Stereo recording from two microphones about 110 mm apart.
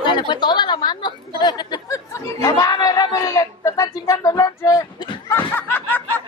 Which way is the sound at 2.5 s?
40° left (ahead or behind).